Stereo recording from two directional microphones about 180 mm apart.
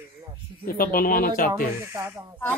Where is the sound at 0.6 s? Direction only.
55° left (ahead or behind).